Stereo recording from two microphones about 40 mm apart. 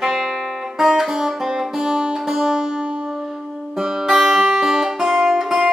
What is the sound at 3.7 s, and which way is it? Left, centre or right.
Music, centre.